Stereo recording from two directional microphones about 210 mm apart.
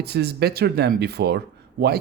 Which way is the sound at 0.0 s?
50° right (ahead or behind).